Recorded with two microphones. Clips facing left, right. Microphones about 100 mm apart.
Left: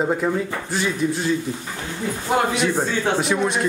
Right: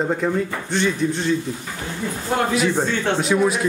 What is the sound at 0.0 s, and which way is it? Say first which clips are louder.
A man's voice: even; 5° left (ahead or behind).